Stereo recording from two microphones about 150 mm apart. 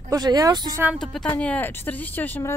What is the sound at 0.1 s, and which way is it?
Speech, 25° right (ahead or behind).